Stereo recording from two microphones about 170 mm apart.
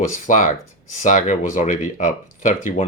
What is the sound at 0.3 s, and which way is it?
Speech, 50° left (ahead or behind).